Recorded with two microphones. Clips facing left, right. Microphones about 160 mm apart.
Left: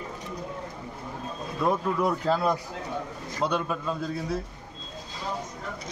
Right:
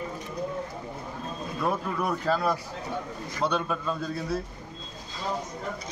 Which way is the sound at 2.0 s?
20° left (ahead or behind).